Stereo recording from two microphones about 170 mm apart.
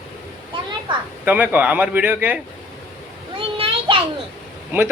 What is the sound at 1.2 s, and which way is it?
Speech, 10° right (ahead or behind).